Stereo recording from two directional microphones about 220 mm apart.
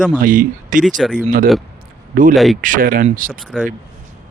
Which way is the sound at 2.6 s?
35° right (ahead or behind).